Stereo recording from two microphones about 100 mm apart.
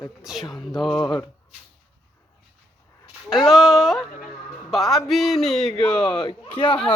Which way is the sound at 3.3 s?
Centre (ahead or behind).